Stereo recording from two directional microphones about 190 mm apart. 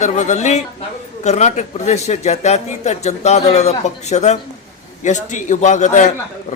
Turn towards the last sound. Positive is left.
turn(degrees=40)  # may be behind; listen again after turning